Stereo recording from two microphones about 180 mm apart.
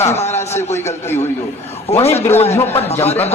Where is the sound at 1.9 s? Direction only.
35° left (ahead or behind).